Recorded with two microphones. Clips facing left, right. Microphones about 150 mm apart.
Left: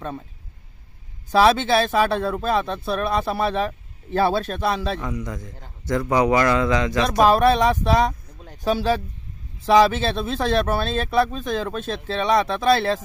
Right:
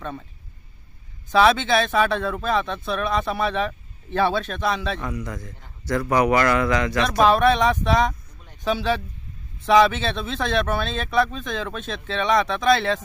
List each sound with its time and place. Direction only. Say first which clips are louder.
1.3 s speech: left 1 dB; 35° left (ahead or behind)
5.0 s a man's voice: left 1 dB; 20° left (ahead or behind)
7.2 s speech: left 1 dB; 35° left (ahead or behind)